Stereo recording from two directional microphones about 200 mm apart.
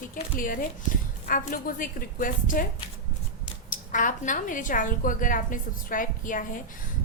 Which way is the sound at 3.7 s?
40° left (ahead or behind).